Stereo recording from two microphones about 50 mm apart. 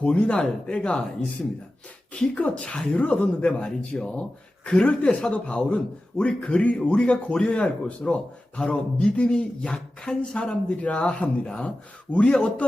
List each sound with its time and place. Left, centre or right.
0.0 s speech: left